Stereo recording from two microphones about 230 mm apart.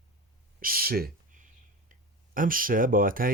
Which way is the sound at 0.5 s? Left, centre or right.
Right.